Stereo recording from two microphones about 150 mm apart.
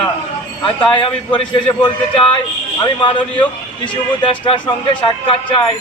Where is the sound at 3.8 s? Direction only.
35° left (ahead or behind).